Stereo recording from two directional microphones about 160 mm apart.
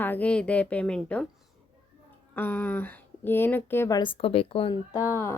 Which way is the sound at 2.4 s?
10° left (ahead or behind).